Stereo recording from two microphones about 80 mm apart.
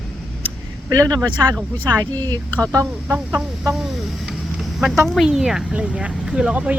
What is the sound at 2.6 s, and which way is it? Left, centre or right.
Speech, right.